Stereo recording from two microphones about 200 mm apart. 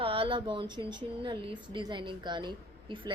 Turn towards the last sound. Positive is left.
turn(degrees=-25)  # may be behind; listen again after turning